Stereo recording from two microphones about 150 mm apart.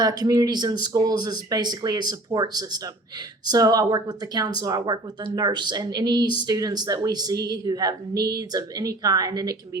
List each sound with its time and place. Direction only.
0.0 s a woman's voice: 25° right (ahead or behind)